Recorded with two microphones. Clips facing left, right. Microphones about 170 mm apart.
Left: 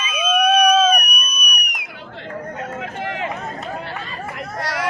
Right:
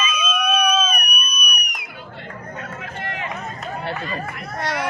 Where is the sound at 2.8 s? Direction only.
90° left.